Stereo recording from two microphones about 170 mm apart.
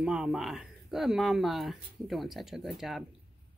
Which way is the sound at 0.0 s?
5° right (ahead or behind).